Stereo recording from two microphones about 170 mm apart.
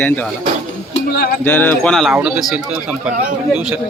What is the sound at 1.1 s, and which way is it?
Music, 65° left (ahead or behind).